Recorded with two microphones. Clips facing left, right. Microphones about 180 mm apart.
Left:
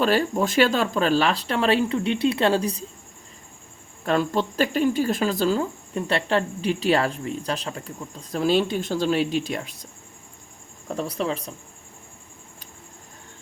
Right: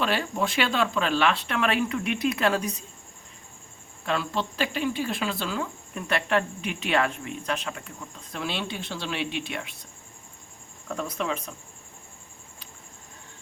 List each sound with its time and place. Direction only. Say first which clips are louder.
0.0 s speech: left 6 dB; 40° left (ahead or behind)
4.0 s speech: left 6 dB; 45° left (ahead or behind)
10.8 s speech: left 3 dB; 35° left (ahead or behind)